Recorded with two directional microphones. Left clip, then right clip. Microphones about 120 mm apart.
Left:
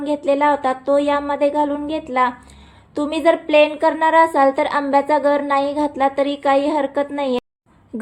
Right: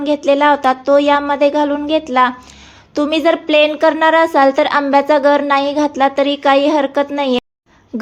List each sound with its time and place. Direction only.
0.0 s a woman's voice: 30° right (ahead or behind)